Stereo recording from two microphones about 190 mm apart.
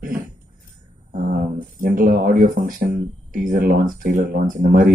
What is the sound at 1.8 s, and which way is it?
Speech, 45° right (ahead or behind).